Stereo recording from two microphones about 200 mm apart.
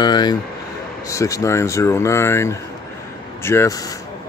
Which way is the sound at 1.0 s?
15° left (ahead or behind).